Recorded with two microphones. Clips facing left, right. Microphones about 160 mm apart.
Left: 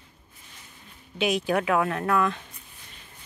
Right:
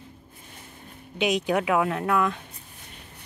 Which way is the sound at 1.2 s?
20° right (ahead or behind).